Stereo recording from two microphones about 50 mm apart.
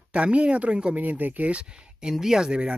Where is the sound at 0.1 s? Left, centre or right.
Right.